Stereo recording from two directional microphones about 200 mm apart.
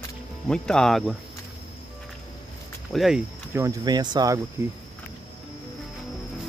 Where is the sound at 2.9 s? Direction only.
Centre (ahead or behind); by 4.4 s 20° right (ahead or behind).